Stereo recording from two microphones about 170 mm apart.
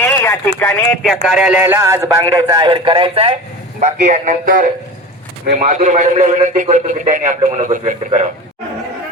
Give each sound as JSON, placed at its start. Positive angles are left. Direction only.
{"t": 0.0, "sound": "a sound", "side_deg": 15}
{"t": 0.6, "sound": "speech", "side_deg": 10}
{"t": 1.0, "sound": "a man's voice", "side_deg": -5}
{"t": 3.8, "sound": "a man's voice", "side_deg": -45}